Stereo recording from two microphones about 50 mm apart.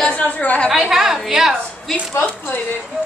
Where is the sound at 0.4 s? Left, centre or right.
Left.